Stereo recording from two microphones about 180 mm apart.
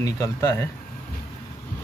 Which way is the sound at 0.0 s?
15° left (ahead or behind).